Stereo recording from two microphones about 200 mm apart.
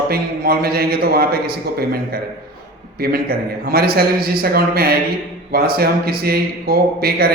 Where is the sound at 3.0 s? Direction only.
50° right (ahead or behind).